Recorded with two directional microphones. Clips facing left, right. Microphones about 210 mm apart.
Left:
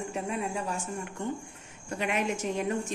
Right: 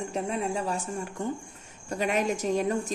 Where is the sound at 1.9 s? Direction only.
40° right (ahead or behind).